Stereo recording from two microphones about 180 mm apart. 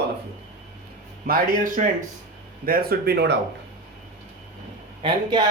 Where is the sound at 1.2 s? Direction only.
55° right (ahead or behind).